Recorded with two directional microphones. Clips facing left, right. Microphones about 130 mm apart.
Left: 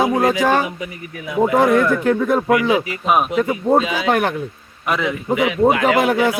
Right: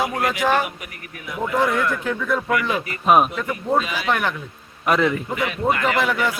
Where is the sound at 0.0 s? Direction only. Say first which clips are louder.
Left 6 dB; 25° left (ahead or behind).